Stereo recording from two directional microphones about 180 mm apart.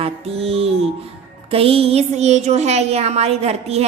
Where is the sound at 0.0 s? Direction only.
35° right (ahead or behind).